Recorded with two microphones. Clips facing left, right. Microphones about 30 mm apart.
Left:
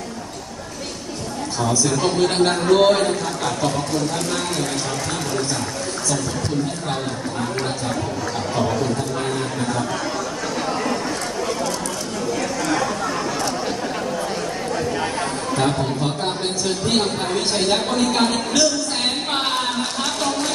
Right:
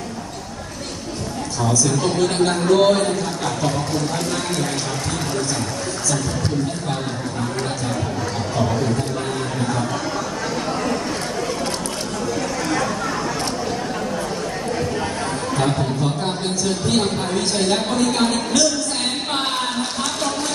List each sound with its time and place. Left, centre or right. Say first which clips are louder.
1.7 s a woman's voice: even; centre
3.4 s speech: left 1 dB; centre
12.6 s a sound: left 1 dB; centre
15.5 s a man's voice: left 1 dB; centre